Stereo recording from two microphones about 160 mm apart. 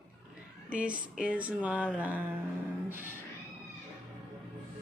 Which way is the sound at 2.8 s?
15° right (ahead or behind).